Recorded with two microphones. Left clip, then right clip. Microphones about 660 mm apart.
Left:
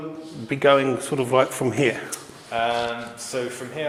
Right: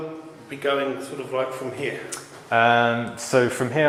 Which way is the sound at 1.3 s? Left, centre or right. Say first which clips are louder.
Left 6 dB; left.